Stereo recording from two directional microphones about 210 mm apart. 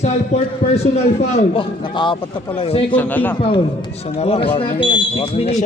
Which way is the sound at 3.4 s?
25° left (ahead or behind).